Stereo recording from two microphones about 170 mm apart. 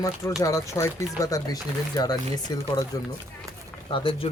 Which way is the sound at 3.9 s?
30° left (ahead or behind).